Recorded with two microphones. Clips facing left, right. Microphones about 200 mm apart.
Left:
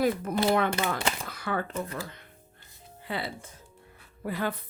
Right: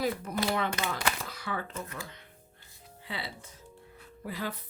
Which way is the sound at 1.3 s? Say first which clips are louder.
Left 5 dB; 55° left (ahead or behind).